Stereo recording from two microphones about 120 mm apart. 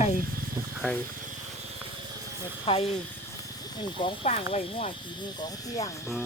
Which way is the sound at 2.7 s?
50° left (ahead or behind).